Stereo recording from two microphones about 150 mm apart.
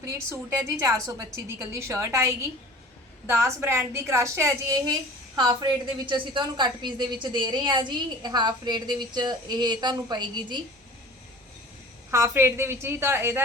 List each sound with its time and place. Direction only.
0.0 s a woman's voice: 20° right (ahead or behind)
12.1 s a woman's voice: 20° right (ahead or behind)